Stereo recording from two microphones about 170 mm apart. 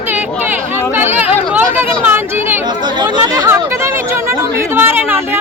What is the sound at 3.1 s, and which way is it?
Speech, 25° right (ahead or behind).